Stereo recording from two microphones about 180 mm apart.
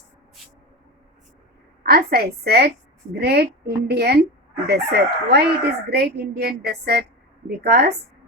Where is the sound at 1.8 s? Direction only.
60° right (ahead or behind).